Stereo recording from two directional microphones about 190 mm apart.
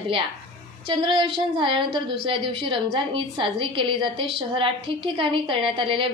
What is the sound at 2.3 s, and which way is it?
A woman's voice, 25° right (ahead or behind).